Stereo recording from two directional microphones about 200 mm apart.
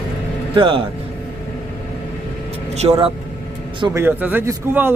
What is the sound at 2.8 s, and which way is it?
A man's voice, 20° right (ahead or behind).